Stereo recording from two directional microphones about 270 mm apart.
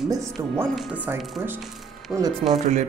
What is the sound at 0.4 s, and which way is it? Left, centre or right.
Speech, centre.